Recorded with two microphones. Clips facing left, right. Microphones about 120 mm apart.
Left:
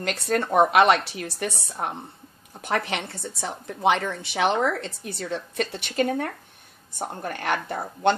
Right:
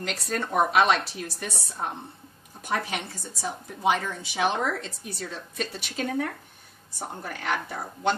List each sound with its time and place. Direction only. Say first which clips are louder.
0.0 s a woman's voice: left 5 dB; 65° left (ahead or behind)
2.6 s a woman's voice: left 3 dB; 65° left (ahead or behind)